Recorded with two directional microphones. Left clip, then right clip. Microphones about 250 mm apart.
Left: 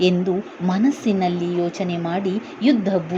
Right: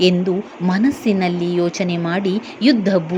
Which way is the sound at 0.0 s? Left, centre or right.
Centre.